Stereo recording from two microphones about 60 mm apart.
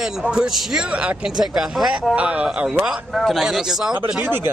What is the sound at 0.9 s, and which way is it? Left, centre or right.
Speech, right.